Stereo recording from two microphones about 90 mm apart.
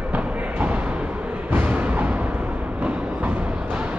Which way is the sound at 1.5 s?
20° right (ahead or behind).